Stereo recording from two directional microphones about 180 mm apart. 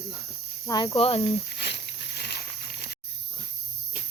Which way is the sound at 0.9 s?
35° left (ahead or behind).